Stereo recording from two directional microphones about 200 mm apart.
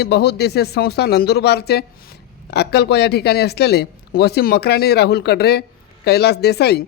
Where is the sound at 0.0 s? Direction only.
55° left (ahead or behind).